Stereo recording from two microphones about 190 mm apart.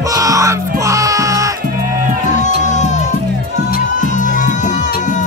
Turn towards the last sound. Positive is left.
turn(degrees=40)  # may be behind; listen again after turning